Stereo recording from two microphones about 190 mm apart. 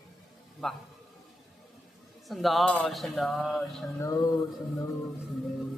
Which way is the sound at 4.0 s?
15° left (ahead or behind).